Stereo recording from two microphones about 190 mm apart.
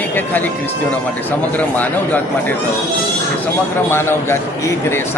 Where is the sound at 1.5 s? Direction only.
10° left (ahead or behind).